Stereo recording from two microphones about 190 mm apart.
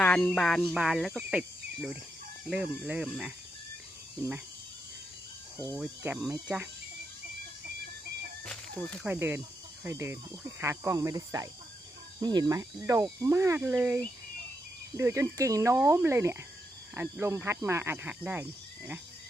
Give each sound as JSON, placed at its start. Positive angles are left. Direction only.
{"t": 0.0, "sound": "a sound", "side_deg": 5}
{"t": 0.3, "sound": "speech", "side_deg": 5}
{"t": 5.5, "sound": "speech", "side_deg": 10}
{"t": 5.8, "sound": "speech", "side_deg": -5}
{"t": 9.0, "sound": "speech", "side_deg": -10}